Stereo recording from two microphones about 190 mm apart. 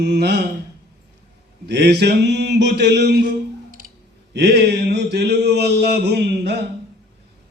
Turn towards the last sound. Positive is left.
turn(degrees=-60)  # may be behind; listen again after turning